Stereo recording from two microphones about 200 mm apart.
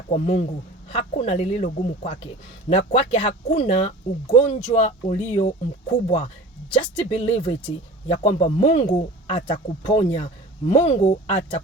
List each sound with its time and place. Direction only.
0.1 s speech: 30° left (ahead or behind)